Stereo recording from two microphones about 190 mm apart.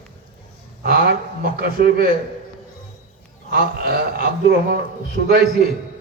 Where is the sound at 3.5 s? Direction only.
55° right (ahead or behind).